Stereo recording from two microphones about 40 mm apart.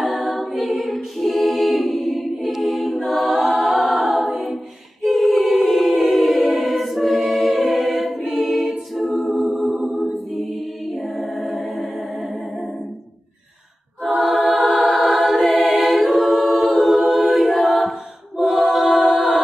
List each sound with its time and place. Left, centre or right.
0.0 s a capella: centre
5.5 s choir: centre
10.9 s a capella: centre
14.0 s choir: centre
16.4 s a capella: centre